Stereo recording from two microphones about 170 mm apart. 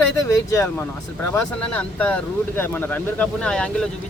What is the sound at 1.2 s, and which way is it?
Speech, 10° left (ahead or behind).